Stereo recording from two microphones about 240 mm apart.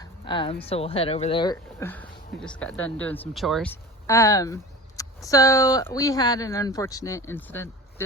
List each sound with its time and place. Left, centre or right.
0.0 s speech: centre